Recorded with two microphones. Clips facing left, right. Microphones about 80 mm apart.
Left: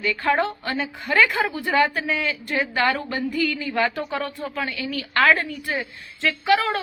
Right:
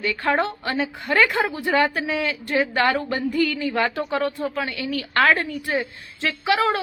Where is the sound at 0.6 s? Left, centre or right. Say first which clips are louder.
Right 2 dB; right.